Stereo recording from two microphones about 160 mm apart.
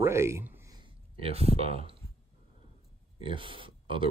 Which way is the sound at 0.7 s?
40° right (ahead or behind).